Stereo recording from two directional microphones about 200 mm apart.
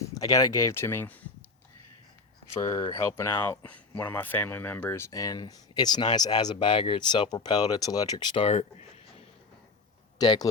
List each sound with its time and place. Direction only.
0.1 s speech: 15° left (ahead or behind)
2.6 s speech: 20° left (ahead or behind)
10.2 s speech: 20° left (ahead or behind)